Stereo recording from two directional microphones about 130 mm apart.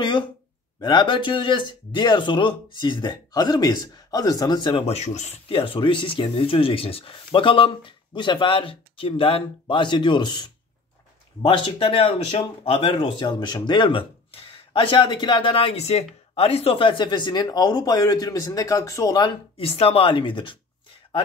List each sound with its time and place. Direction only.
0.7 s speech: 35° left (ahead or behind); by 5.4 s 60° left (ahead or behind)
5.5 s speech: 40° left (ahead or behind); by 19.2 s 25° left (ahead or behind)
19.2 s speech: 45° left (ahead or behind)